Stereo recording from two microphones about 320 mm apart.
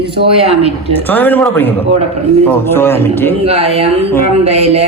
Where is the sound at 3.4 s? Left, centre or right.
Centre.